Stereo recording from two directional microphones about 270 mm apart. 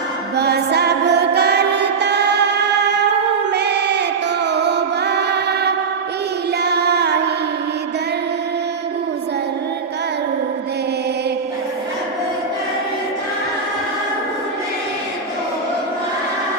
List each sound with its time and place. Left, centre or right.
0.3 s music: right
3.5 s crowd: right
4.4 s music: right